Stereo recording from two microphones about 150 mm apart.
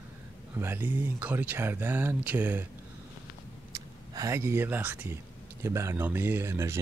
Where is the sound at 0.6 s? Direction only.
15° right (ahead or behind).